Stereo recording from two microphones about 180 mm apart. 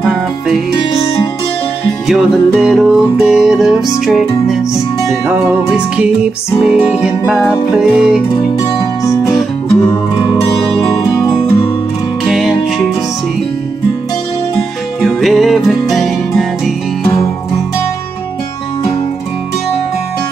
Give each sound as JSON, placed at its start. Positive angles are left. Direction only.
{"t": 0.0, "sound": "music", "side_deg": -5}
{"t": 2.0, "sound": "music", "side_deg": 0}
{"t": 6.6, "sound": "music", "side_deg": -5}
{"t": 10.3, "sound": "music", "side_deg": 20}
{"t": 12.3, "sound": "music", "side_deg": 0}
{"t": 15.0, "sound": "music", "side_deg": 0}